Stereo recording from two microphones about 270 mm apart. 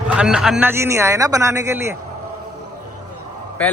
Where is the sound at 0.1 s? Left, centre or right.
Centre.